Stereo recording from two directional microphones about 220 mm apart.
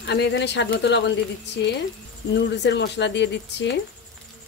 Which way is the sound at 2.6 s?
50° left (ahead or behind).